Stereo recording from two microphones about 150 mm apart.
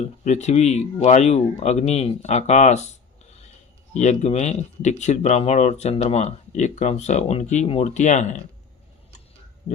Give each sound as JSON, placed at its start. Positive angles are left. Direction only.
{"t": 0.3, "sound": "speech", "side_deg": 50}
{"t": 3.9, "sound": "speech", "side_deg": 50}